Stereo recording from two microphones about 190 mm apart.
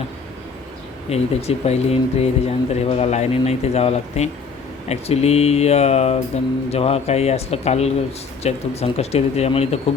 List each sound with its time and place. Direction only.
1.1 s speech: 35° left (ahead or behind)